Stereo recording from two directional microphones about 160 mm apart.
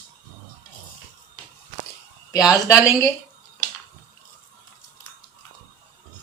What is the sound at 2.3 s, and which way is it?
Speech, 20° left (ahead or behind).